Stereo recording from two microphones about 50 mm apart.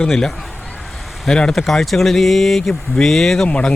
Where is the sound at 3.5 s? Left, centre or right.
Left.